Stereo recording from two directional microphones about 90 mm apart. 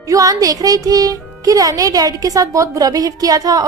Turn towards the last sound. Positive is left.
turn(degrees=-40)  # may be behind; listen again after turning